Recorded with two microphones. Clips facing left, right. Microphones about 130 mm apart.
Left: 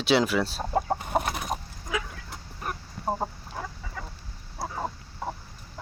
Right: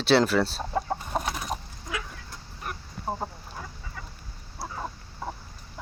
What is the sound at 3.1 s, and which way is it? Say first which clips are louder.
Chicken: left 3 dB; 40° left (ahead or behind).